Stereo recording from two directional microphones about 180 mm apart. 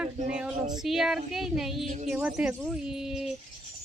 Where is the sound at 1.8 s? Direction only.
40° right (ahead or behind).